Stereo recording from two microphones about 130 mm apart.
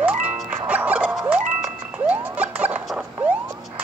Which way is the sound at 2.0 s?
10° right (ahead or behind).